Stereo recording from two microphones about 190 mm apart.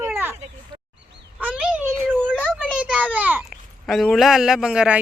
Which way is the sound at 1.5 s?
5° right (ahead or behind).